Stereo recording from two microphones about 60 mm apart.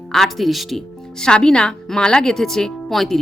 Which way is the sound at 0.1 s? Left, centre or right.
Centre.